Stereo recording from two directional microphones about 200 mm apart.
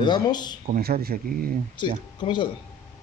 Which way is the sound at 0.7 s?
50° right (ahead or behind).